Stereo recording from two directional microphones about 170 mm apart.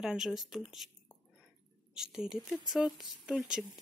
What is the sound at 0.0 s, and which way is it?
Speech, 5° right (ahead or behind).